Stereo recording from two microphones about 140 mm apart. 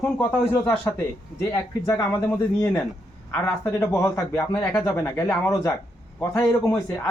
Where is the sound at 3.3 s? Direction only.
20° left (ahead or behind).